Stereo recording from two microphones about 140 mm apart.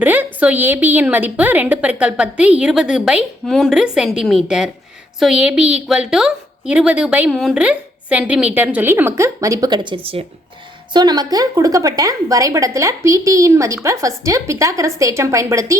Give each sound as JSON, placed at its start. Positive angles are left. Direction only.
{"t": 0.0, "sound": "a sound", "side_deg": -15}
{"t": 0.3, "sound": "a woman's voice", "side_deg": -10}
{"t": 10.9, "sound": "a woman's voice", "side_deg": -30}